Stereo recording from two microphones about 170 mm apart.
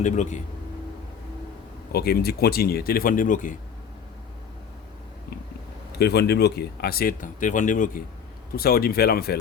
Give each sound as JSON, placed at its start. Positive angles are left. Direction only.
{"t": 0.0, "sound": "speech", "side_deg": 45}
{"t": 1.9, "sound": "speech", "side_deg": 65}
{"t": 6.0, "sound": "speech", "side_deg": 70}
{"t": 8.5, "sound": "speech", "side_deg": 60}